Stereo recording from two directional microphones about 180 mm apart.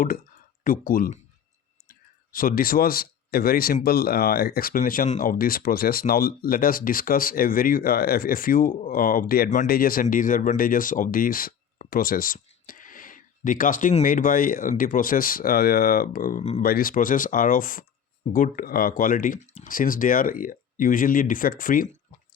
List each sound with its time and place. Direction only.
0.6 s speech: 50° left (ahead or behind)
16.4 s speech: 35° left (ahead or behind)
16.6 s speech: 55° left (ahead or behind)